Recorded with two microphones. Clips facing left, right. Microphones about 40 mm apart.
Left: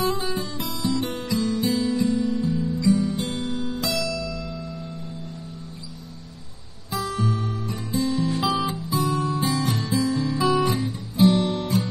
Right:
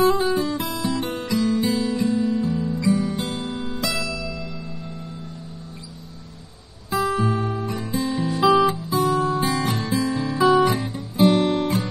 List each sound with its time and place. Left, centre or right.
0.0 s guitar: right
3.3 s music: right
6.9 s guitar: right